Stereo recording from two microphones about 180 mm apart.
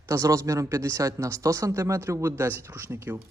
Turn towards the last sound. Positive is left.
turn(degrees=-15)  # may be behind; listen again after turning